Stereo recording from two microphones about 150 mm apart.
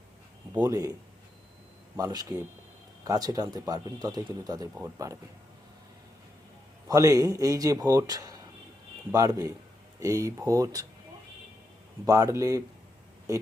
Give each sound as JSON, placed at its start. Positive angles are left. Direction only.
{"t": 0.6, "sound": "speech", "side_deg": -20}
{"t": 2.0, "sound": "speech", "side_deg": -25}
{"t": 6.8, "sound": "speech", "side_deg": -20}
{"t": 12.0, "sound": "speech", "side_deg": -20}